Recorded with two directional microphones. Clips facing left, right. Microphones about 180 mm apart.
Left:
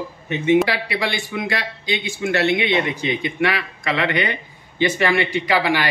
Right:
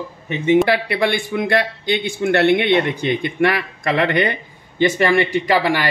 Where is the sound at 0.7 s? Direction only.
55° right (ahead or behind).